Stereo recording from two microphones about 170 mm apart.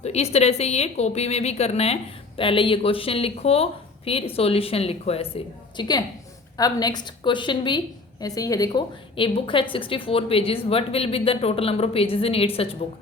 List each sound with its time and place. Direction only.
0.0 s a woman's voice: 40° left (ahead or behind)